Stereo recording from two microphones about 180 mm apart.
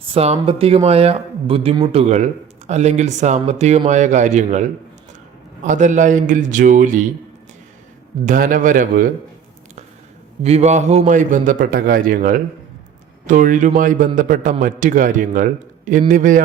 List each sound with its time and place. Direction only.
0.1 s a man's voice: 35° right (ahead or behind)
8.2 s a man's voice: 50° right (ahead or behind)
10.4 s a man's voice: 40° right (ahead or behind)